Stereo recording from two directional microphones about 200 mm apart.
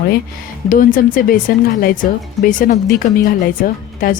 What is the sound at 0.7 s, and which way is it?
Speech, 45° left (ahead or behind).